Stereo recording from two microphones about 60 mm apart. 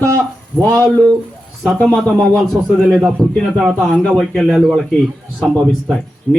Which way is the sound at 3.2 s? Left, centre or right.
Centre.